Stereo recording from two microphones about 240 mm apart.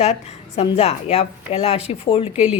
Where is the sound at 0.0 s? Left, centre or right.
Left.